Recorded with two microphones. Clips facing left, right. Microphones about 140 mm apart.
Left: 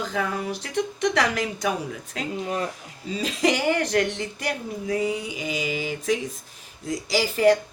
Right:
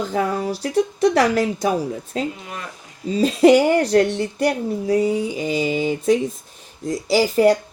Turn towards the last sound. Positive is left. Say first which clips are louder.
# right 4 dB
turn(degrees=-35)  # may be behind; listen again after turning